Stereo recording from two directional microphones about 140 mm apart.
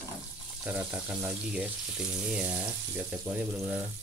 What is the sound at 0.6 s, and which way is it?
Speech, 10° right (ahead or behind).